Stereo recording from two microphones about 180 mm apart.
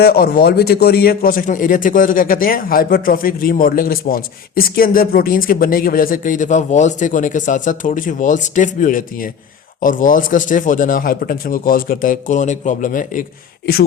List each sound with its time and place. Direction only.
0.0 s a man's voice: 60° left (ahead or behind)